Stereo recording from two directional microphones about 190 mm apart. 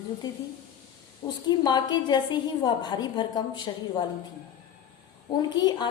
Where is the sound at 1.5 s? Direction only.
20° left (ahead or behind).